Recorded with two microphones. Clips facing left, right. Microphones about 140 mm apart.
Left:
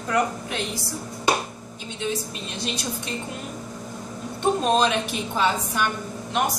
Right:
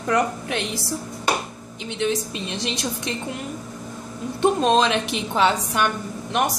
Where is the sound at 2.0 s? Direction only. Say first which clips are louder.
Right 5 dB; 90° right.